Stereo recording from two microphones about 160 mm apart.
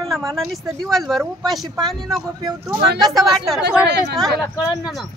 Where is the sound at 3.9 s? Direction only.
90° right.